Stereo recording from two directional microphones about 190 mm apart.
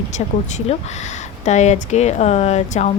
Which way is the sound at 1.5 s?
35° left (ahead or behind).